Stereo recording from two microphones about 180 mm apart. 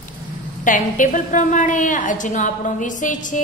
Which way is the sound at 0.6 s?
45° left (ahead or behind).